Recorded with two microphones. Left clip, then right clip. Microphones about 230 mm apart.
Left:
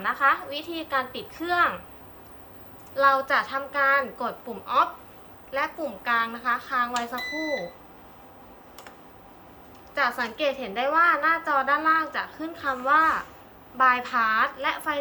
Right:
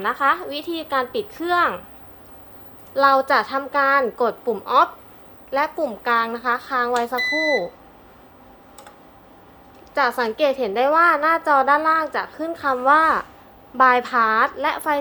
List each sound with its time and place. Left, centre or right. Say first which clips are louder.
0.0 s a woman's voice: right 3 dB; right
2.9 s a woman's voice: right 5 dB; right
9.9 s a woman's voice: right 6 dB; right